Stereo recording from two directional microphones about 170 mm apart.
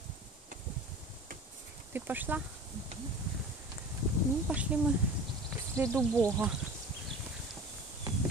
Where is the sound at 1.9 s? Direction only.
10° right (ahead or behind).